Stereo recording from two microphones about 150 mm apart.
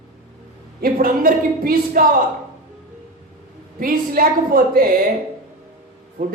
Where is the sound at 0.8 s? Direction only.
75° right (ahead or behind).